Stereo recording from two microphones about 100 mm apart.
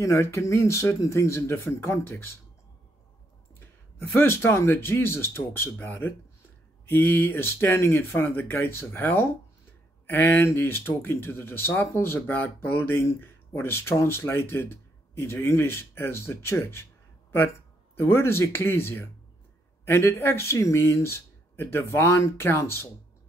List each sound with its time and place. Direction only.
0.0 s speech: 30° left (ahead or behind)
4.2 s speech: 25° left (ahead or behind)
17.9 s speech: 25° left (ahead or behind)